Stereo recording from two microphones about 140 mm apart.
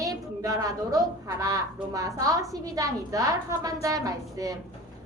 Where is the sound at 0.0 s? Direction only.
25° right (ahead or behind).